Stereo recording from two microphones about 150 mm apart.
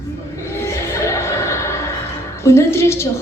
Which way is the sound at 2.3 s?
20° left (ahead or behind).